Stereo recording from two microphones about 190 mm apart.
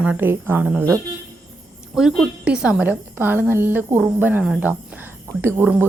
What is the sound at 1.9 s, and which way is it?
Speech, 5° right (ahead or behind).